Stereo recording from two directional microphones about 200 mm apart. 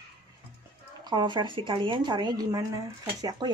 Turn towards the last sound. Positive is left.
turn(degrees=-20)  # may be behind; listen again after turning